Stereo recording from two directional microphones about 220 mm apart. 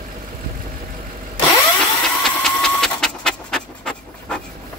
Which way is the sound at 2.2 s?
Centre (ahead or behind).